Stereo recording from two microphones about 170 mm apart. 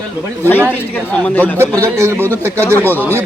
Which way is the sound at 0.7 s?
10° left (ahead or behind).